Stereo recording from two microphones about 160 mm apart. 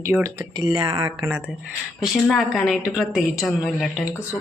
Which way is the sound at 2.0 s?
Centre (ahead or behind).